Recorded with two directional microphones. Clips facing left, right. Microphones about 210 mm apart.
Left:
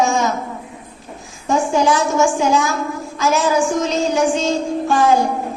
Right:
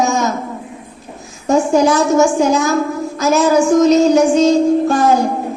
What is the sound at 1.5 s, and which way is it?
A woman's voice, 40° right (ahead or behind).